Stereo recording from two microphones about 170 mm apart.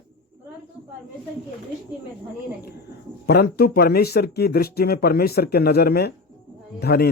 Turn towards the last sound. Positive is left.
turn(degrees=70)  # may be behind; listen again after turning